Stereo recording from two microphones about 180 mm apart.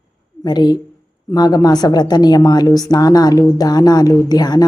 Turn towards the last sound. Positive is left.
turn(degrees=20)  # may be behind; listen again after turning